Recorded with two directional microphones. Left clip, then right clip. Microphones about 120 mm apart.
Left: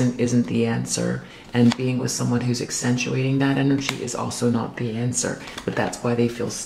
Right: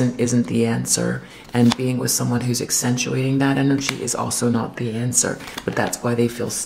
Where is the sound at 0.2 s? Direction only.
25° right (ahead or behind).